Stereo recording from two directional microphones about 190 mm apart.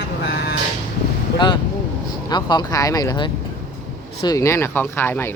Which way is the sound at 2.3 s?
25° left (ahead or behind).